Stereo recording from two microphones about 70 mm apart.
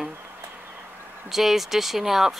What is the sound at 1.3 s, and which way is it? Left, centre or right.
Speech, centre.